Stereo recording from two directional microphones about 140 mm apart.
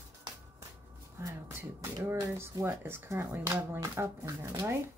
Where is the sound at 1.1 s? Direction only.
20° right (ahead or behind).